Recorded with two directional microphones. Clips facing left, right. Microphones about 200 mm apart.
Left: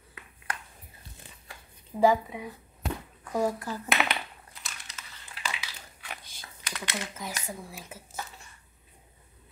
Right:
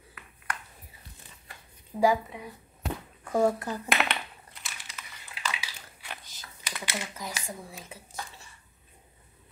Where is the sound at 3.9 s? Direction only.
Centre (ahead or behind).